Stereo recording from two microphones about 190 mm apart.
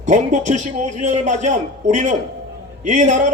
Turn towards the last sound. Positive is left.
turn(degrees=-40)  # may be behind; listen again after turning